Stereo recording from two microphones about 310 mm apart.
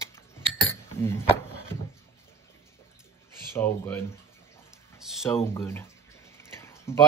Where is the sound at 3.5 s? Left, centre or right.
Centre.